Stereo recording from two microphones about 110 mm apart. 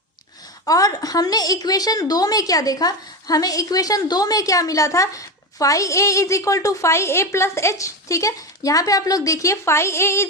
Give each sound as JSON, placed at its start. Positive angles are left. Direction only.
{"t": 0.6, "sound": "a woman's voice", "side_deg": 35}